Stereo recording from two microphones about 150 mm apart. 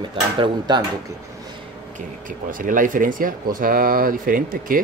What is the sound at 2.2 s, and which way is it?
Speech, 65° right (ahead or behind).